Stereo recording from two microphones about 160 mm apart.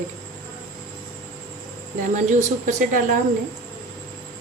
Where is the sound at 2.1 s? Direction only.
50° right (ahead or behind).